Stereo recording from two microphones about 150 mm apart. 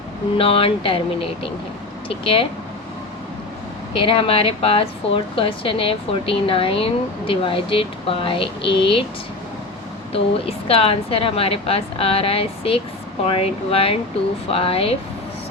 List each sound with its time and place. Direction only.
0.3 s a woman's voice: 40° left (ahead or behind)
3.9 s a woman's voice: 35° left (ahead or behind)
10.1 s a woman's voice: 40° left (ahead or behind)